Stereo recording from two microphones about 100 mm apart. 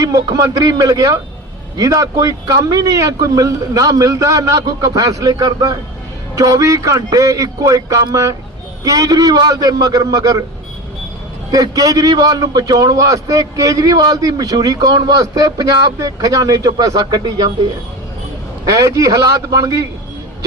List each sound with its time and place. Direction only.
0.0 s a man's voice: 35° right (ahead or behind)
11.5 s a man's voice: 35° right (ahead or behind)
18.6 s a man's voice: 35° right (ahead or behind)